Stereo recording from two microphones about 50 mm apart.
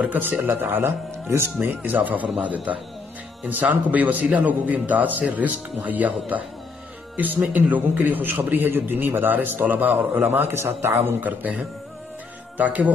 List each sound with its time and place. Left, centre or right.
0.0 s speech: right
1.7 s a man's voice: right
11.1 s speech: right
12.5 s speech: right